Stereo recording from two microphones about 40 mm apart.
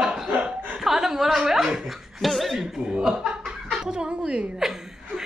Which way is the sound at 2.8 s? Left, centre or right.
Right.